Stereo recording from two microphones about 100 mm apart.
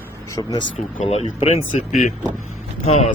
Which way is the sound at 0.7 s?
90° left.